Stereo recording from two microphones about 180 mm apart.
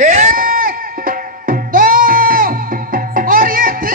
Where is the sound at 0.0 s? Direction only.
40° right (ahead or behind).